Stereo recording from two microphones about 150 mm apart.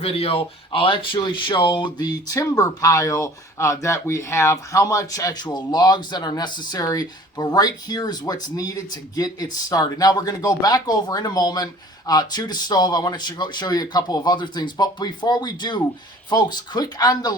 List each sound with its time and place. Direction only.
0.0 s speech: 40° left (ahead or behind)